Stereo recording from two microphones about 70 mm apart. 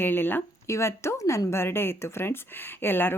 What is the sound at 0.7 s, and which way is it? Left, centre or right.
A woman's voice, left.